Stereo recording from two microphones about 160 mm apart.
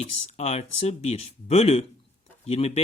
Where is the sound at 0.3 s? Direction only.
40° left (ahead or behind).